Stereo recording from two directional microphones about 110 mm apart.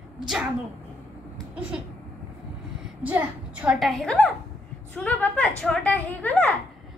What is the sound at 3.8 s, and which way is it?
A woman's voice, 5° left (ahead or behind).